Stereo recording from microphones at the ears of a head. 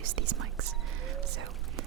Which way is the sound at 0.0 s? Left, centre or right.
Right.